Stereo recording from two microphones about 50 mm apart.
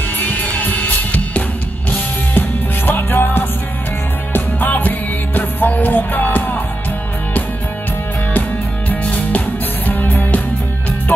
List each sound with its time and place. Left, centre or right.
0.2 s music: left
8.3 s music: left